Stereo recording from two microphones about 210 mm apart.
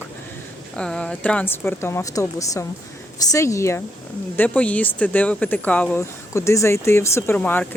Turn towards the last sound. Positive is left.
turn(degrees=10)  # may be behind; listen again after turning